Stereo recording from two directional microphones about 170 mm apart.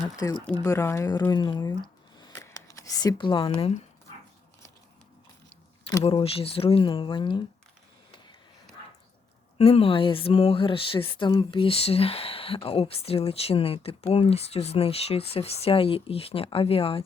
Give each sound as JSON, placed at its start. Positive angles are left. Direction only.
{"t": 0.2, "sound": "speech", "side_deg": 20}
{"t": 6.1, "sound": "speech", "side_deg": 35}
{"t": 9.6, "sound": "speech", "side_deg": 35}